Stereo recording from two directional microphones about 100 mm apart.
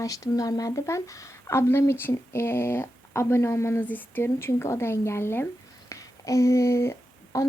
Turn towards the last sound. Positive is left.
turn(degrees=30)  # may be behind; listen again after turning